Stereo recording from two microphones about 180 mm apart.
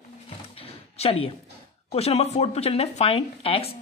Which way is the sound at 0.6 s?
35° left (ahead or behind).